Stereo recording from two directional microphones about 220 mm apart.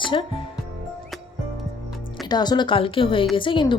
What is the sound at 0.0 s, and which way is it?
Speech, 25° left (ahead or behind).